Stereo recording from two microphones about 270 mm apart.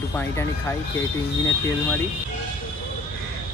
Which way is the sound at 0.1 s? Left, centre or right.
Centre.